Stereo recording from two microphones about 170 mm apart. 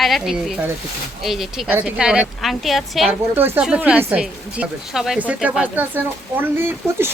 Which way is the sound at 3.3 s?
10° right (ahead or behind).